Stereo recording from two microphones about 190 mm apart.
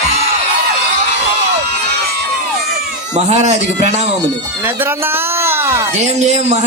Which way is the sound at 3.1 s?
35° right (ahead or behind).